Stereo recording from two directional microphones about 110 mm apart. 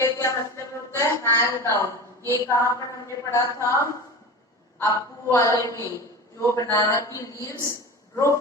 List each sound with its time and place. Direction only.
0.0 s a woman's voice: 25° left (ahead or behind)